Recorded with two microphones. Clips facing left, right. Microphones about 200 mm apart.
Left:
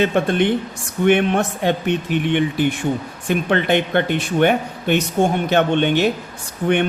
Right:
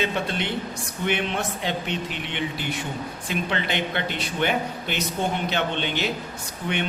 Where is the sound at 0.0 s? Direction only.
55° left (ahead or behind).